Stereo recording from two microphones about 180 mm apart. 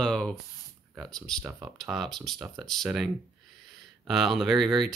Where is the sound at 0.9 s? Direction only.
Centre (ahead or behind).